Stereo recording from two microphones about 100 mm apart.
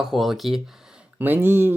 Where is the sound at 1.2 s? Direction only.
20° right (ahead or behind).